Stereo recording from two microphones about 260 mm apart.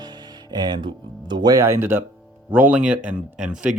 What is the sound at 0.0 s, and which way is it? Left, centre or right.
Speech, centre.